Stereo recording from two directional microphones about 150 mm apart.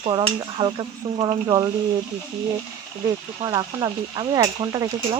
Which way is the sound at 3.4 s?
25° right (ahead or behind).